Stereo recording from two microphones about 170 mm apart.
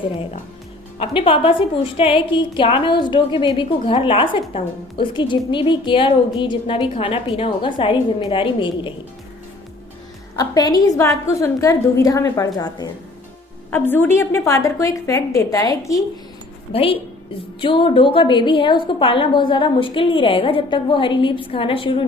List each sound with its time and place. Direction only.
0.9 s a woman's voice: 30° left (ahead or behind)
10.3 s a woman's voice: 20° left (ahead or behind)
13.7 s a woman's voice: 10° left (ahead or behind)
16.7 s a woman's voice: 35° left (ahead or behind)